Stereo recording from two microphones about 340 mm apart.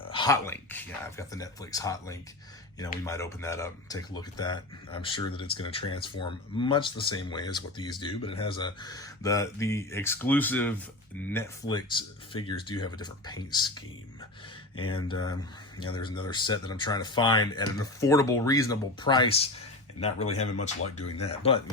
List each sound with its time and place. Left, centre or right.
0.1 s speech: centre